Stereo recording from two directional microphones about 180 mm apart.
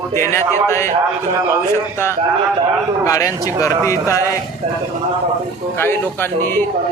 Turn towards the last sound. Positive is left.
turn(degrees=10)  # may be behind; listen again after turning